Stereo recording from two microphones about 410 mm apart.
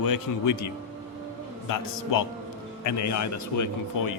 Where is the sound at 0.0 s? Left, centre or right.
Left.